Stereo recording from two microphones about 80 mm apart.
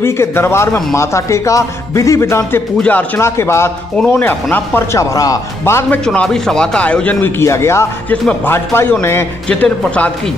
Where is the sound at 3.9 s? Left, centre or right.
Centre.